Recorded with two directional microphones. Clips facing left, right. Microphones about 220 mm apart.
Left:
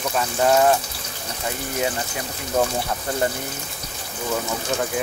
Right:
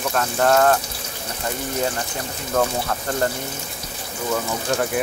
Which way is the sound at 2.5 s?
15° left (ahead or behind).